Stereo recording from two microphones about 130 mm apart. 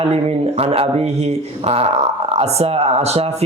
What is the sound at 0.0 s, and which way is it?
Speech, 55° right (ahead or behind).